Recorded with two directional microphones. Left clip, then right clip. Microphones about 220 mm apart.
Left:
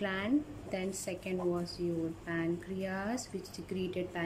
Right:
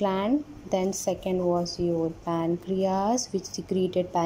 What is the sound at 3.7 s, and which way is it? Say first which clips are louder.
Speech: right 12 dB; 20° right (ahead or behind).